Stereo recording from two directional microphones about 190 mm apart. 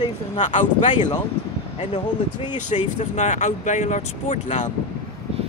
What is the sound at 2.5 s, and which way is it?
Speech, 40° left (ahead or behind).